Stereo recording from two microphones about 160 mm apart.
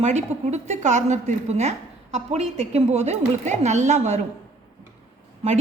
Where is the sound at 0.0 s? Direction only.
45° right (ahead or behind).